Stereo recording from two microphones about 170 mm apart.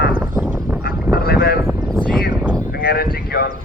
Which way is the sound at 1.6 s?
15° right (ahead or behind).